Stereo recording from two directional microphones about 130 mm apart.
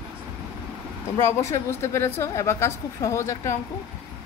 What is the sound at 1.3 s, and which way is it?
A woman's voice, 20° left (ahead or behind).